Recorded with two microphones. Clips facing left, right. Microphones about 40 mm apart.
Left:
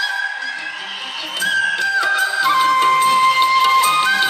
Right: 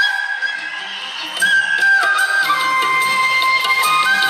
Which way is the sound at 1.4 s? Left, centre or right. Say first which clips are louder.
Right 4 dB; centre.